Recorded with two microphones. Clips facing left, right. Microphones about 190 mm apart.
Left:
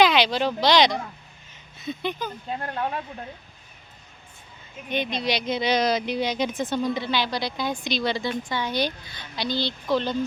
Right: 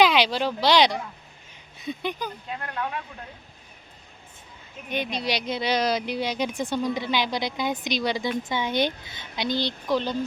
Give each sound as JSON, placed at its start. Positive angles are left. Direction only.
{"t": 0.0, "sound": "a woman's voice", "side_deg": -10}
{"t": 2.5, "sound": "speech", "side_deg": 30}
{"t": 4.9, "sound": "a woman's voice", "side_deg": -10}